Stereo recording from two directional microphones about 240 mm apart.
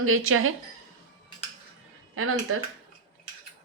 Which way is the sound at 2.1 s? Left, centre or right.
Right.